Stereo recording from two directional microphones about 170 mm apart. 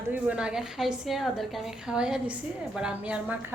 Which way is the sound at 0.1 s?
5° right (ahead or behind).